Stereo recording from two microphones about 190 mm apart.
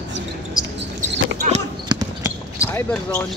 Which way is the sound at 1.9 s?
20° right (ahead or behind).